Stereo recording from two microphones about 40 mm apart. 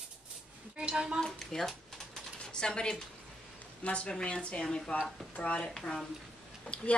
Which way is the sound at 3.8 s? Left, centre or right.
Left.